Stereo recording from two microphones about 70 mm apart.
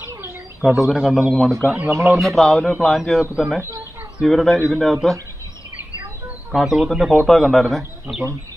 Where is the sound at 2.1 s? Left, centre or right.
Centre.